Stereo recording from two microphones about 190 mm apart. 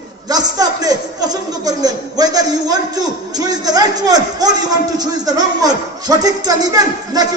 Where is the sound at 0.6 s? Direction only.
20° right (ahead or behind).